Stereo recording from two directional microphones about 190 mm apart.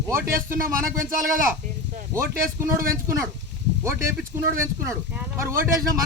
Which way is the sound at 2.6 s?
15° right (ahead or behind).